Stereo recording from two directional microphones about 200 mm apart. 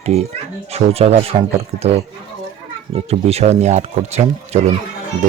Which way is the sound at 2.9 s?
30° right (ahead or behind).